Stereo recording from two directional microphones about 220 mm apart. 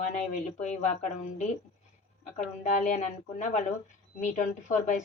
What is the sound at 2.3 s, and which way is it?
Speech, 35° left (ahead or behind).